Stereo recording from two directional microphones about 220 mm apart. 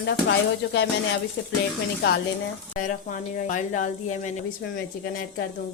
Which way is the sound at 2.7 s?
35° left (ahead or behind).